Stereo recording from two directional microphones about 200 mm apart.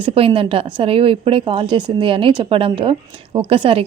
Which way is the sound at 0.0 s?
25° right (ahead or behind).